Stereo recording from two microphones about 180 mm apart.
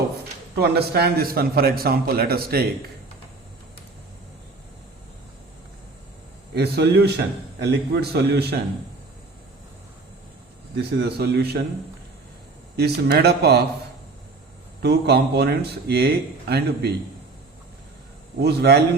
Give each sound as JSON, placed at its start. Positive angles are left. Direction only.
{"t": 0.5, "sound": "speech", "side_deg": -60}
{"t": 6.5, "sound": "speech", "side_deg": -65}
{"t": 10.8, "sound": "speech", "side_deg": -65}
{"t": 12.7, "sound": "speech", "side_deg": -65}
{"t": 14.8, "sound": "speech", "side_deg": -65}
{"t": 18.3, "sound": "speech", "side_deg": -65}